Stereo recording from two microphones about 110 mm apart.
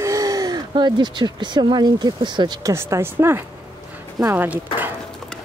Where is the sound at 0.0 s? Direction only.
30° right (ahead or behind).